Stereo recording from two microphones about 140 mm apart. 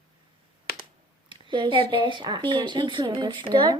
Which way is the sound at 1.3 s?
35° right (ahead or behind).